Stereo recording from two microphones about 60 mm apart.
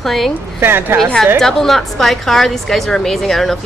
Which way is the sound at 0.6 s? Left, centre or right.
Right.